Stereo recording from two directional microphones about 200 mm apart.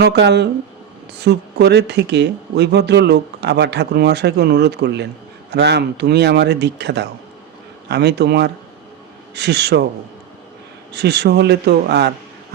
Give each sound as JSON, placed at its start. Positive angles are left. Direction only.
{"t": 0.0, "sound": "speech", "side_deg": -60}
{"t": 10.9, "sound": "speech", "side_deg": -55}